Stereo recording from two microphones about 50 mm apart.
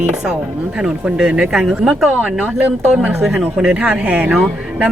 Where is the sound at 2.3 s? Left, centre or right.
Right.